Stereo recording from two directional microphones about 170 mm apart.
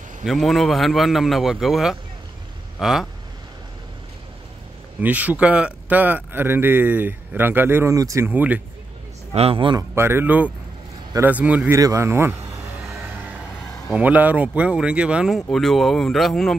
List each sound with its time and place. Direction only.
0.2 s a man's voice: centre (ahead or behind)
5.0 s a man's voice: 10° right (ahead or behind)
9.3 s a man's voice: 35° right (ahead or behind)
9.9 s a man's voice: 15° right (ahead or behind)
13.0 s music: 10° right (ahead or behind)
13.8 s a man's voice: 10° right (ahead or behind)